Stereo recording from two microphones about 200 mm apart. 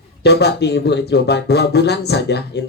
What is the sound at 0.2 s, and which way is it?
Speech, 55° left (ahead or behind).